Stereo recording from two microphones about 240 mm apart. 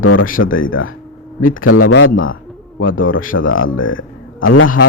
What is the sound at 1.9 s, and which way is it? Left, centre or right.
Bird, left.